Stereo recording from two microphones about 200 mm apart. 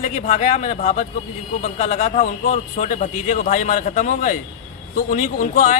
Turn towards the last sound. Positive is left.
turn(degrees=40)  # may be behind; listen again after turning